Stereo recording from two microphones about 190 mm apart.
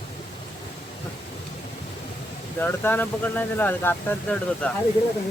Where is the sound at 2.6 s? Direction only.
10° left (ahead or behind).